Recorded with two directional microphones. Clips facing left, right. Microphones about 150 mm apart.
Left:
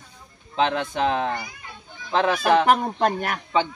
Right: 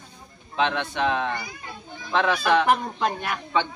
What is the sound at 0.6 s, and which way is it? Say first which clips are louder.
Speech: left 2 dB; 40° left (ahead or behind).